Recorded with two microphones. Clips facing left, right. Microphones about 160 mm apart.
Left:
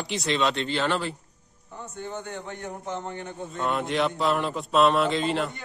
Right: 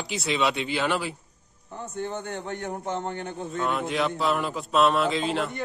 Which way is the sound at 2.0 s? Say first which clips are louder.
Right 1 dB; 55° right (ahead or behind).